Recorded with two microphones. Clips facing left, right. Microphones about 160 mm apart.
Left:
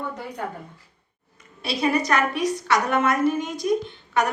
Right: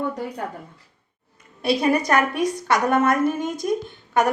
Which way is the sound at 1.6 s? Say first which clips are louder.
Right 3 dB; 55° right (ahead or behind).